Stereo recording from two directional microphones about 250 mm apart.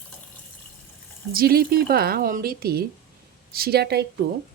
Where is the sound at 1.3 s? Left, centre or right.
Right.